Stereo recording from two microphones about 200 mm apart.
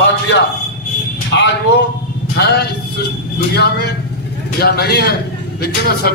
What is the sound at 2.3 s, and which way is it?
Music, 55° left (ahead or behind).